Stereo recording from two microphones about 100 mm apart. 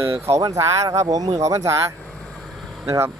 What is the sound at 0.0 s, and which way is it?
Speech, 25° right (ahead or behind).